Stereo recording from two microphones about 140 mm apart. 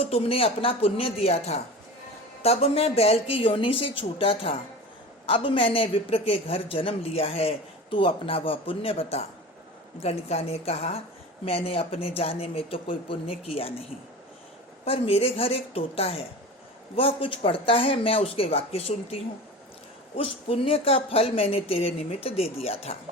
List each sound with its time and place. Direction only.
0.0 s a woman's voice: 45° left (ahead or behind)
14.8 s a woman's voice: 45° left (ahead or behind)
20.1 s a woman's voice: 45° left (ahead or behind)